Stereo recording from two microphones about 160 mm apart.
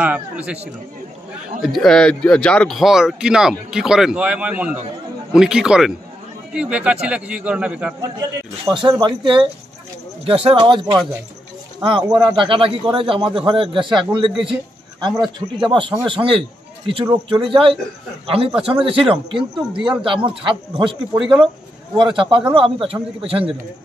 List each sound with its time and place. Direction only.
0.0 s speech: 10° right (ahead or behind)
1.6 s speech: centre (ahead or behind)
8.0 s a man's voice: 25° right (ahead or behind)
21.9 s a man's voice: 30° right (ahead or behind)